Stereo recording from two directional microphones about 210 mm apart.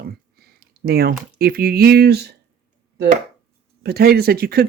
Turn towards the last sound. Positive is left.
turn(degrees=-45)  # may be behind; listen again after turning